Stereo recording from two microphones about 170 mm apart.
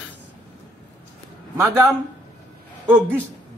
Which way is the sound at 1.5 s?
20° right (ahead or behind).